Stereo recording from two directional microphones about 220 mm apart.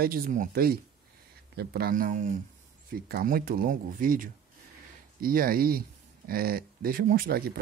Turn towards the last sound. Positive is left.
turn(degrees=-45)  # may be behind; listen again after turning